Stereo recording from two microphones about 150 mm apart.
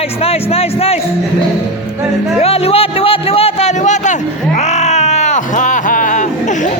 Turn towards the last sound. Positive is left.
turn(degrees=60)  # may be behind; listen again after turning